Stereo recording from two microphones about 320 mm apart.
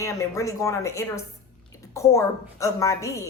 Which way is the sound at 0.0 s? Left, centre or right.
Centre.